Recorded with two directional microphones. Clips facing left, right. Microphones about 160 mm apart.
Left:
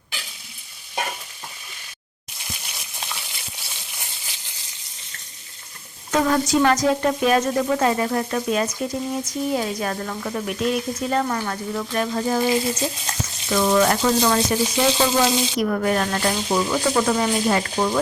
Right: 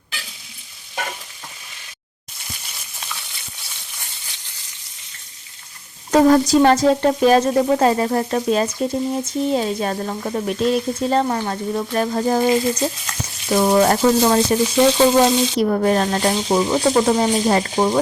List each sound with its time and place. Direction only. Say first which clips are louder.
6.1 s speech: right 7 dB; 35° right (ahead or behind)
13.5 s frying: right 3 dB; 30° right (ahead or behind)
15.2 s speech: right 4 dB; 35° right (ahead or behind)
17.7 s frying: right 4 dB; 25° right (ahead or behind)